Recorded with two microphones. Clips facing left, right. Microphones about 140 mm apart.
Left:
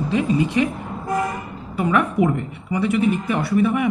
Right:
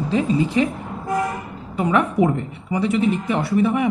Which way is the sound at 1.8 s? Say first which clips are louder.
Right 1 dB; 25° right (ahead or behind).